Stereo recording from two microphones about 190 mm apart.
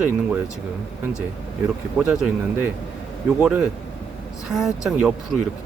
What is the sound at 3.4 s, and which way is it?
Speech, 5° right (ahead or behind).